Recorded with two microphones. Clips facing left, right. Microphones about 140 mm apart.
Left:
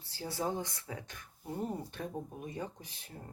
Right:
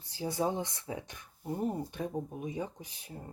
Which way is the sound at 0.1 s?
20° right (ahead or behind).